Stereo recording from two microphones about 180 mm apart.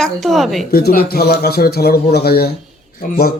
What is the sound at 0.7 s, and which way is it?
A man's voice, 55° left (ahead or behind).